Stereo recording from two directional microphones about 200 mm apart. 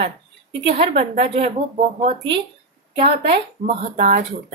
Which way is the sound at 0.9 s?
30° right (ahead or behind).